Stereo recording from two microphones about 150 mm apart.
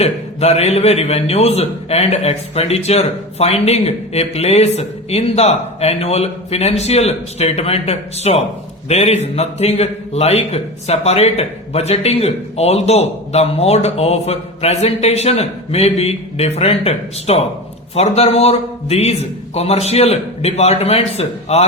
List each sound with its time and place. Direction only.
0.0 s a man's voice: 45° left (ahead or behind)